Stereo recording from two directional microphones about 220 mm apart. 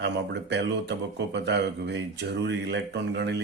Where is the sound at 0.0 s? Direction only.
50° right (ahead or behind).